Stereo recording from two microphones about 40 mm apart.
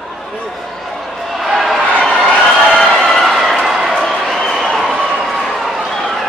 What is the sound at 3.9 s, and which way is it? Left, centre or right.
Crowd, centre.